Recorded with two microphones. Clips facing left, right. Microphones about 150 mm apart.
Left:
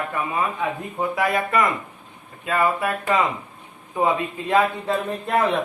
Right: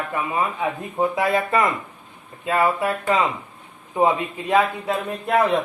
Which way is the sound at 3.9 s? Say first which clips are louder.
Right 2 dB; 20° right (ahead or behind).